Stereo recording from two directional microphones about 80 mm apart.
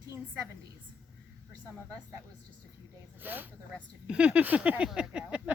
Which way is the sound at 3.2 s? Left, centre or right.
Right.